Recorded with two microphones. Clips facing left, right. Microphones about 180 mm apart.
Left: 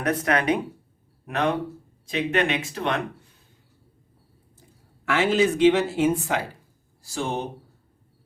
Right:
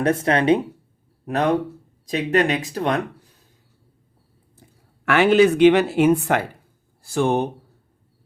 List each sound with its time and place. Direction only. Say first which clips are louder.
0.0 s speech: right 4 dB; 30° right (ahead or behind)
5.0 s speech: right 6 dB; 65° right (ahead or behind)